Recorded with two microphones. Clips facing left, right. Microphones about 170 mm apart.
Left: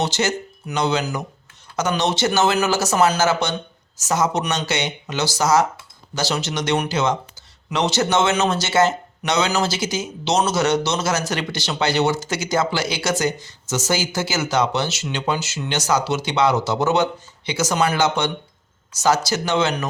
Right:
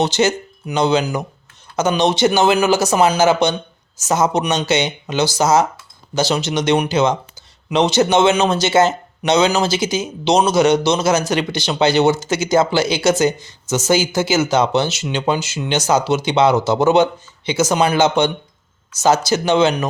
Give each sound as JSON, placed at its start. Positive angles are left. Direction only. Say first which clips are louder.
{"t": 0.0, "sound": "speech", "louder": "right 5 dB", "side_deg": -20}